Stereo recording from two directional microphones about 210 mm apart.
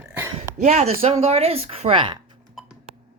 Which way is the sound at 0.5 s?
35° right (ahead or behind).